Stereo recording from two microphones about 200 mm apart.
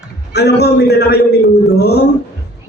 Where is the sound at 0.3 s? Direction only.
55° left (ahead or behind).